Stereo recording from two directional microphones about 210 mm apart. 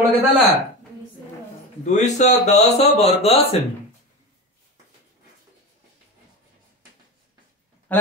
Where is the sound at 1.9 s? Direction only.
35° left (ahead or behind).